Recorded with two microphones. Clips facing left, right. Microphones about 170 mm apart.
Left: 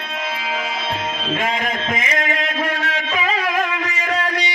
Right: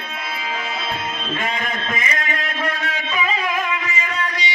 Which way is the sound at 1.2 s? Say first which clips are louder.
Left 5 dB; 90° left.